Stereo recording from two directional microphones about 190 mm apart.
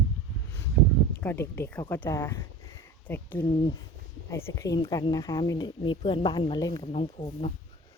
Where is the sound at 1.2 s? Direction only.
10° left (ahead or behind).